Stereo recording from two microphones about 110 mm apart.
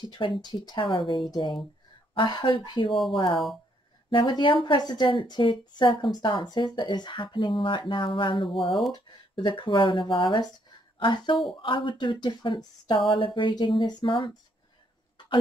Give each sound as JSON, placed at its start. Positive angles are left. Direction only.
{"t": 0.0, "sound": "speech", "side_deg": 45}
{"t": 8.5, "sound": "speech", "side_deg": 0}
{"t": 9.3, "sound": "speech", "side_deg": 50}